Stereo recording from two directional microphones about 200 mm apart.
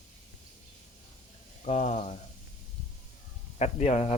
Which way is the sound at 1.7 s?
35° left (ahead or behind).